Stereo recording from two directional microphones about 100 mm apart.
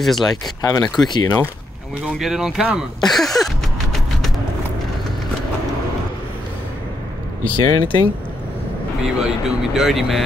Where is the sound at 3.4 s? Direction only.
Centre (ahead or behind).